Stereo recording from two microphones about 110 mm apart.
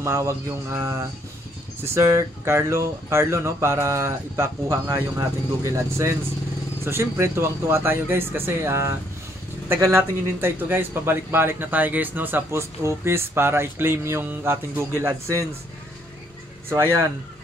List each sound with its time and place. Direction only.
0.0 s a man's voice: 25° right (ahead or behind)
16.6 s a man's voice: 20° right (ahead or behind)